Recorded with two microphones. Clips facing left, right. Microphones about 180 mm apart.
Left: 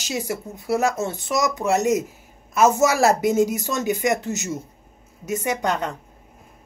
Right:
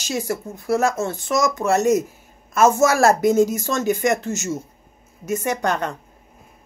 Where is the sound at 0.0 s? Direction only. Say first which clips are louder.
Right 2 dB; 15° left (ahead or behind).